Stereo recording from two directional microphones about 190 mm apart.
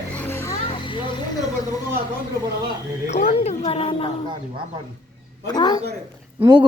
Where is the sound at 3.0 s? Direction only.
35° left (ahead or behind).